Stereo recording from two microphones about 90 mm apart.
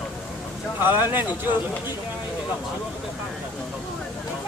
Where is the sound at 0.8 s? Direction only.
25° right (ahead or behind).